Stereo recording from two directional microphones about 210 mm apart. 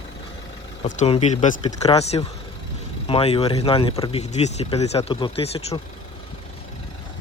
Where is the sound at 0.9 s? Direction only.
30° left (ahead or behind).